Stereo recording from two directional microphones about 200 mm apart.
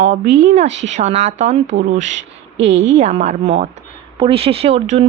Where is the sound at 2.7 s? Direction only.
65° right (ahead or behind).